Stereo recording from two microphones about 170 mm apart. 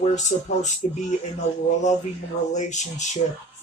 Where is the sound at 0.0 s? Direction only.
45° left (ahead or behind).